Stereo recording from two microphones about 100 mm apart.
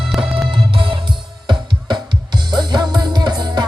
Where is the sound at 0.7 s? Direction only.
60° right (ahead or behind).